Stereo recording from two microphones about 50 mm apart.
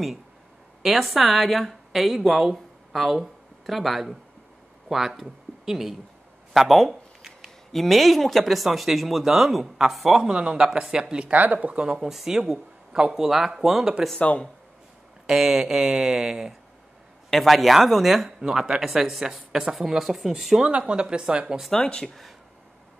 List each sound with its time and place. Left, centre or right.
0.8 s speech: centre
6.5 s a sound: centre
7.7 s speech: centre
10.2 s speech: centre
11.2 s speech: right
11.8 s speech: centre
12.1 s speech: centre
15.2 s speech: centre
20.6 s speech: centre
21.7 s speech: centre
22.0 s speech: centre